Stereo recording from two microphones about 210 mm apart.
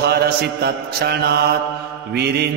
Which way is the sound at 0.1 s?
50° right (ahead or behind).